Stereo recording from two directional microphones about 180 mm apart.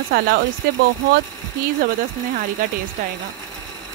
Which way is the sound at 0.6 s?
55° right (ahead or behind).